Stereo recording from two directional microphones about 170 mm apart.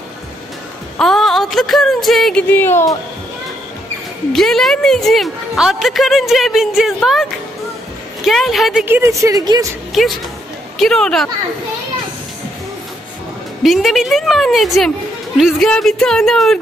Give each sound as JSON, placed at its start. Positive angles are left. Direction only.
{"t": 0.9, "sound": "speech", "side_deg": 0}
{"t": 2.5, "sound": "speech", "side_deg": 15}
{"t": 4.3, "sound": "a woman's voice", "side_deg": 0}
{"t": 8.8, "sound": "a woman's voice", "side_deg": -15}
{"t": 9.9, "sound": "a woman's voice", "side_deg": 0}
{"t": 13.6, "sound": "a woman's voice", "side_deg": 0}